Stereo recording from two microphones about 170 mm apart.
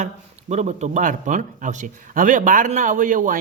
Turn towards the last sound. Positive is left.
turn(degrees=-50)  # may be behind; listen again after turning